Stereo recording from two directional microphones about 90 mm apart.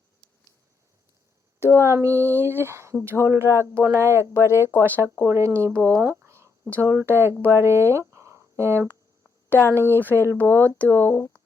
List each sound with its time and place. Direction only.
1.5 s a sound: 30° left (ahead or behind)
1.8 s speech: 30° right (ahead or behind)
4.4 s speech: 30° left (ahead or behind)
4.8 s speech: 30° right (ahead or behind)
6.2 s a sound: 30° right (ahead or behind)
6.9 s speech: 25° right (ahead or behind)
10.0 s speech: 20° left (ahead or behind)